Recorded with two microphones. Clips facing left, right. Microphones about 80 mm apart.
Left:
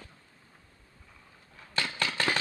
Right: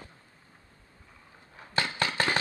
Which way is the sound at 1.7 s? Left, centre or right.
Centre.